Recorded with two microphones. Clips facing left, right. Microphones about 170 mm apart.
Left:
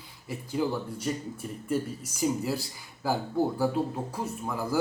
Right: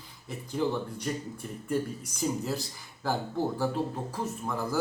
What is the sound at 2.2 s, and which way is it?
Speech, 10° left (ahead or behind).